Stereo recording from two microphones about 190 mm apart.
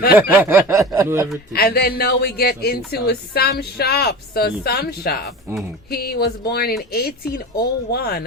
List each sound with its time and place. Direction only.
0.2 s snicker: 10° right (ahead or behind)
1.5 s speech: 55° left (ahead or behind)